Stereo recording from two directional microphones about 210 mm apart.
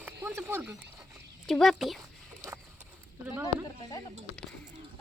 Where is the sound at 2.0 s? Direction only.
15° right (ahead or behind).